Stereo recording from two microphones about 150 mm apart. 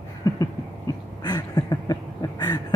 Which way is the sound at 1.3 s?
25° left (ahead or behind).